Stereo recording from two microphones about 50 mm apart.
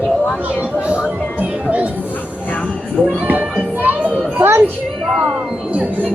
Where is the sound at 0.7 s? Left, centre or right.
Right.